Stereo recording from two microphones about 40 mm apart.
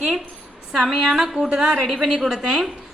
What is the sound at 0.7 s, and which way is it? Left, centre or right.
A woman's voice, centre.